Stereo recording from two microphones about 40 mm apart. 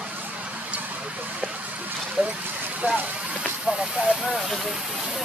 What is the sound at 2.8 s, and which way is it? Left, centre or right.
Speech, right.